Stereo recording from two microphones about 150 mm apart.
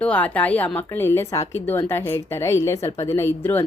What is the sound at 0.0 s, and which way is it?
Speech, 10° left (ahead or behind).